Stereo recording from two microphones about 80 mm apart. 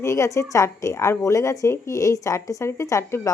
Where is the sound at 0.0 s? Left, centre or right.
Left.